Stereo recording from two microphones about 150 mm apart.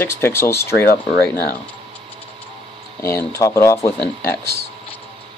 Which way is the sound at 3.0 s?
20° left (ahead or behind).